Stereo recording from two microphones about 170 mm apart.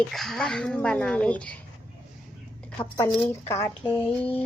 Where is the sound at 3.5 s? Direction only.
15° left (ahead or behind).